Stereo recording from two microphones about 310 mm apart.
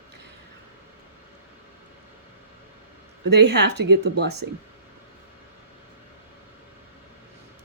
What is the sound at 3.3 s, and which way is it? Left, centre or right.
Speech, right.